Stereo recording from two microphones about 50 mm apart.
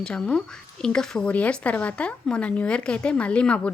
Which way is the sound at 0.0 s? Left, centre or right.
Centre.